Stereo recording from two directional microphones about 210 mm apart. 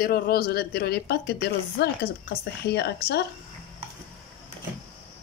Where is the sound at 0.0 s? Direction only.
45° left (ahead or behind).